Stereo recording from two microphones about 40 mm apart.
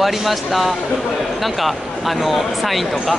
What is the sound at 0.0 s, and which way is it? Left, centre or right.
Speech, centre.